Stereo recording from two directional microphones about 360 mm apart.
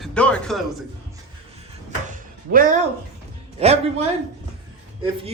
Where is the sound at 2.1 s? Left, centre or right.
Right.